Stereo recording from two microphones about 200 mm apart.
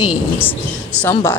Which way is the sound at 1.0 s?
10° left (ahead or behind).